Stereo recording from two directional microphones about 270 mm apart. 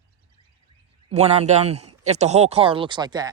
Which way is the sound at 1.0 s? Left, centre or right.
Right.